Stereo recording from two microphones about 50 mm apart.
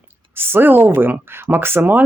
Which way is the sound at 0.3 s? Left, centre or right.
Right.